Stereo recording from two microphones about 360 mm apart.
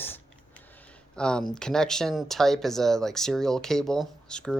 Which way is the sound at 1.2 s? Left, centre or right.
Centre.